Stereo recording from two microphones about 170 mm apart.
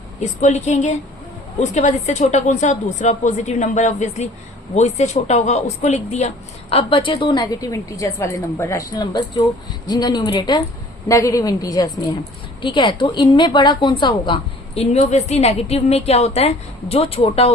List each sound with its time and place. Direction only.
0.2 s a woman's voice: 45° left (ahead or behind)
14.8 s a woman's voice: 40° left (ahead or behind)